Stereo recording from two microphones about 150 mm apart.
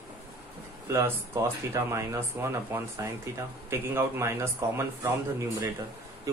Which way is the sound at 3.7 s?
15° right (ahead or behind).